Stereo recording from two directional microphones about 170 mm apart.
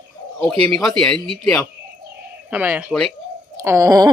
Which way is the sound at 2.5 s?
10° right (ahead or behind).